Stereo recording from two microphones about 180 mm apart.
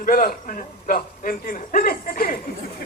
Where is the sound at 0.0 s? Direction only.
55° left (ahead or behind).